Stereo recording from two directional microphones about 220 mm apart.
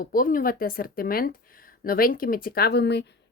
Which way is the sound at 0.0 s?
40° left (ahead or behind).